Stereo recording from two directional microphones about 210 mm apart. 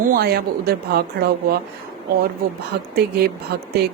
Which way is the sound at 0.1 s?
50° right (ahead or behind).